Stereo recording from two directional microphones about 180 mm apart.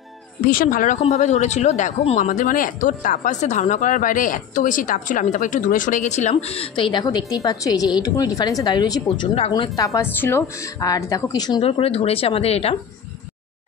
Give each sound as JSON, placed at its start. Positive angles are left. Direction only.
{"t": 0.5, "sound": "speech", "side_deg": 50}
{"t": 9.5, "sound": "speech", "side_deg": 20}